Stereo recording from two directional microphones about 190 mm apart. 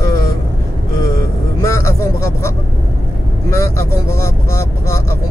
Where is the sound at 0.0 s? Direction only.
15° left (ahead or behind).